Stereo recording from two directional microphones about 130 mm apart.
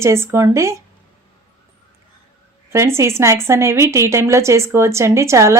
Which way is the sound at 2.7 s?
20° right (ahead or behind).